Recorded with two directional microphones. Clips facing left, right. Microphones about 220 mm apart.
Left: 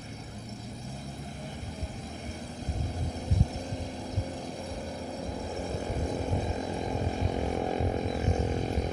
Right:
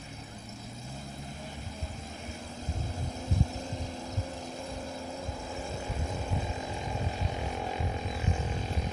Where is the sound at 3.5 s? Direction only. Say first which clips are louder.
Left 2 dB; 15° left (ahead or behind).